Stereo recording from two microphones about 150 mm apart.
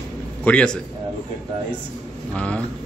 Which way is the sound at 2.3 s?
10° left (ahead or behind).